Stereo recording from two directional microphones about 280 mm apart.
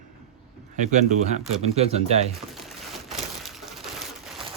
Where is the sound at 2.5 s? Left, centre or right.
Centre.